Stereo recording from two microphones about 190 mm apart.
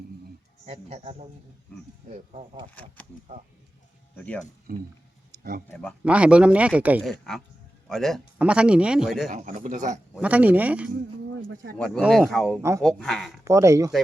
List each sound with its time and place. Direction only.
0.6 s a man's voice: 35° right (ahead or behind)
2.8 s speech: 5° left (ahead or behind)
4.7 s speech: 50° right (ahead or behind)
6.1 s speech: 5° right (ahead or behind)
9.3 s a man's voice: 40° right (ahead or behind)
10.2 s speech: 5° right (ahead or behind)
13.4 s speech: 15° right (ahead or behind)